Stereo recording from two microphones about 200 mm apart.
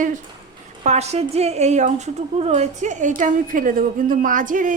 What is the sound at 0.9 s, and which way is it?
A woman's voice, 30° right (ahead or behind).